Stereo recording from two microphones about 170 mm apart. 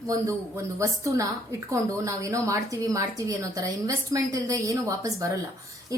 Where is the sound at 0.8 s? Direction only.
20° right (ahead or behind).